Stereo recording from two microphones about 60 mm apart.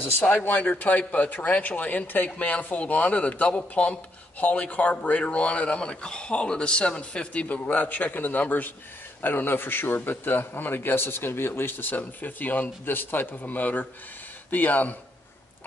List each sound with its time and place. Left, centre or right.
0.0 s a man's voice: left